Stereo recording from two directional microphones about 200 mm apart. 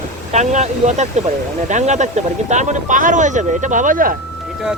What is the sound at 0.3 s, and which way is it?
Speech, 35° right (ahead or behind).